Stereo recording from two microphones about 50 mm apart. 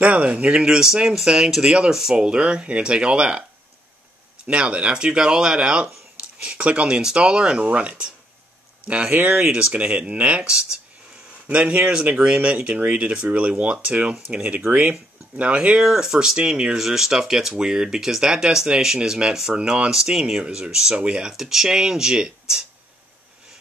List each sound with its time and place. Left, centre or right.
0.0 s speech: right
4.5 s speech: right
11.4 s speech: right
15.8 s speech: centre
16.7 s speech: centre
21.3 s speech: centre